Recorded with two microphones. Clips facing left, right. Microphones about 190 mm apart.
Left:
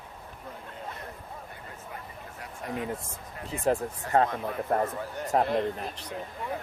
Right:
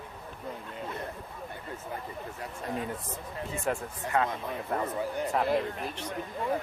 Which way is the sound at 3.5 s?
35° left (ahead or behind).